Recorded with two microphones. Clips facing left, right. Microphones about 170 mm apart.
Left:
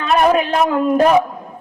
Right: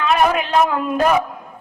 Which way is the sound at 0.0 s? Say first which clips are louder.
Left 3 dB; 40° left (ahead or behind).